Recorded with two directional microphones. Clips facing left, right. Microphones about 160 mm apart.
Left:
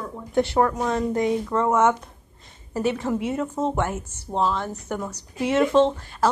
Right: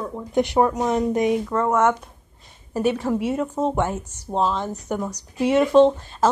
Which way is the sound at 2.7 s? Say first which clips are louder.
Right 2 dB; 10° right (ahead or behind).